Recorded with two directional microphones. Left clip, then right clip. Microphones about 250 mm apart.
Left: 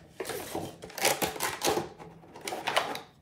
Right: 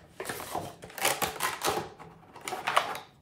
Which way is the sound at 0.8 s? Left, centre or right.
Centre.